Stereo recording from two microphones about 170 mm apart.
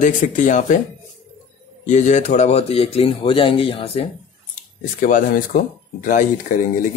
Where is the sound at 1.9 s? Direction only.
45° left (ahead or behind).